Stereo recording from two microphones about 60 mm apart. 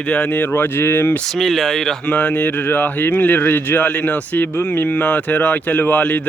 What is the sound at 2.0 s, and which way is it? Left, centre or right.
Speech, left.